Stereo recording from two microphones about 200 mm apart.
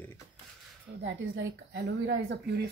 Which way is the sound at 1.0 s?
65° right (ahead or behind).